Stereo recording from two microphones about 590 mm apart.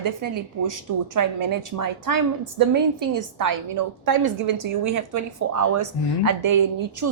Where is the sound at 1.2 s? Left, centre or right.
Right.